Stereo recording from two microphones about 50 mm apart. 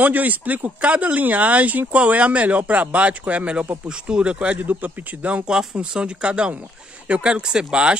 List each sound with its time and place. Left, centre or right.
0.0 s speech: right
4.6 s speech: right
5.5 s speech: centre